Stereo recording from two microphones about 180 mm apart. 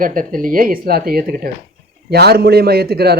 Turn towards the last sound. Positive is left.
turn(degrees=-60)  # may be behind; listen again after turning